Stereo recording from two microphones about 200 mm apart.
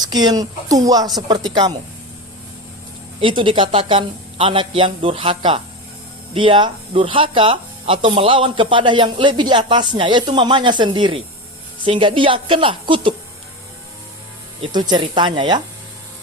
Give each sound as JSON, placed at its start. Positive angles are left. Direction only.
{"t": 0.0, "sound": "speech", "side_deg": -20}
{"t": 3.2, "sound": "speech", "side_deg": -25}
{"t": 14.6, "sound": "speech", "side_deg": -20}